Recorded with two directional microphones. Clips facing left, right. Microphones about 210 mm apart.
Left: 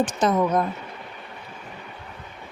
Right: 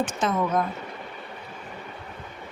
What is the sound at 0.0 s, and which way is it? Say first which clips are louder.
Speech: left 4 dB; 35° left (ahead or behind).